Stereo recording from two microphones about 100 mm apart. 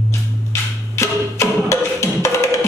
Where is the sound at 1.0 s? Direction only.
25° left (ahead or behind).